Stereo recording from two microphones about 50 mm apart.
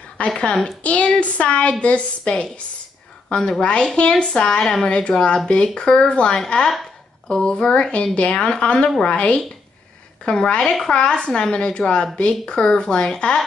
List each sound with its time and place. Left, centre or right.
0.2 s a woman's voice: left